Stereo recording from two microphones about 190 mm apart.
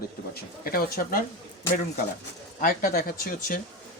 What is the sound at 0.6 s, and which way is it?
Speech, 50° left (ahead or behind).